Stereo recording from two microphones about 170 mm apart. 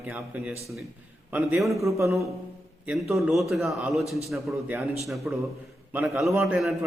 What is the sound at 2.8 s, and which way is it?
Speech, centre (ahead or behind).